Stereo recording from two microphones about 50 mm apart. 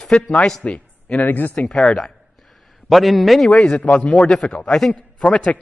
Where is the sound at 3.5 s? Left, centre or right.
Centre.